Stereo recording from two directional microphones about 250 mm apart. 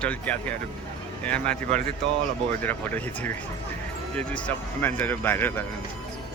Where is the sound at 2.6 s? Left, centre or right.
Centre.